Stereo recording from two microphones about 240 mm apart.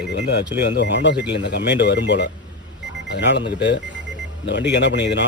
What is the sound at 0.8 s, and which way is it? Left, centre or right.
A man's voice, left.